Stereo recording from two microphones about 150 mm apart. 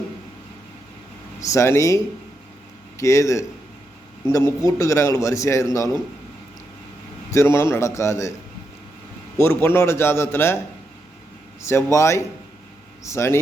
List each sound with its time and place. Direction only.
1.4 s a man's voice: 20° left (ahead or behind)
3.0 s a man's voice: 20° left (ahead or behind)
7.3 s a man's voice: 20° left (ahead or behind)
9.4 s a man's voice: 15° left (ahead or behind)
11.7 s a man's voice: 20° left (ahead or behind)